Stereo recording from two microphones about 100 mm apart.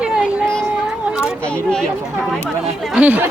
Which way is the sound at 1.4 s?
10° left (ahead or behind).